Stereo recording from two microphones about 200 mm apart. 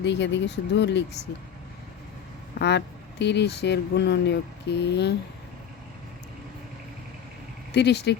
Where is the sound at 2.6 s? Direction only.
60° left (ahead or behind).